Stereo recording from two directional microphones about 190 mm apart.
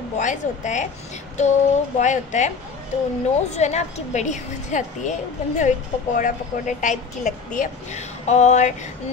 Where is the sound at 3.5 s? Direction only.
35° left (ahead or behind).